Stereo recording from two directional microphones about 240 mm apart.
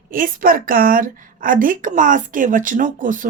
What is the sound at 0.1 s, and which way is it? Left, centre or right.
Speech, right.